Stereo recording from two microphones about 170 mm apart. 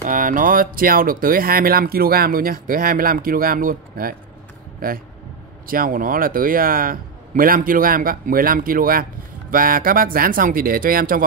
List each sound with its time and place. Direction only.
0.0 s speech: 50° right (ahead or behind)